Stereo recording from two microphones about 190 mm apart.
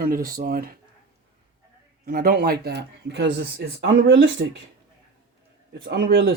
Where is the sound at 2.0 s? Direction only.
50° right (ahead or behind).